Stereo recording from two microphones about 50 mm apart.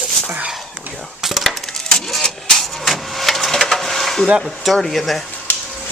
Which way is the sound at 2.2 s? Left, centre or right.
Centre.